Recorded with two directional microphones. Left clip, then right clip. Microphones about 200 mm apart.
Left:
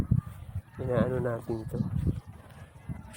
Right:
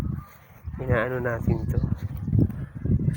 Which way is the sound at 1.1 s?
20° right (ahead or behind).